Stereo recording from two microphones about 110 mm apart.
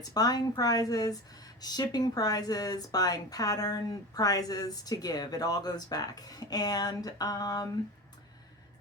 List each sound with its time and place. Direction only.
0.0 s speech: 35° left (ahead or behind)